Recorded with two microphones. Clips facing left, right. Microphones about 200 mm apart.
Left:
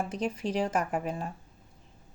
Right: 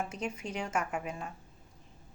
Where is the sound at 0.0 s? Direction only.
35° left (ahead or behind).